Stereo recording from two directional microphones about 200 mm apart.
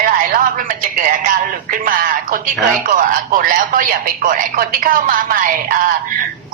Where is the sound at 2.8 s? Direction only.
45° right (ahead or behind).